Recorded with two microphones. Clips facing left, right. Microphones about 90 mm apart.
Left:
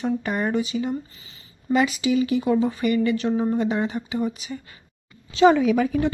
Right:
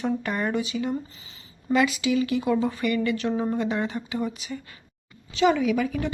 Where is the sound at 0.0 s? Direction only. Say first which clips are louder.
Left 2 dB; 10° left (ahead or behind).